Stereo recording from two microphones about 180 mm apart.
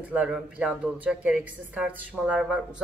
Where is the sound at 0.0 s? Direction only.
5° right (ahead or behind).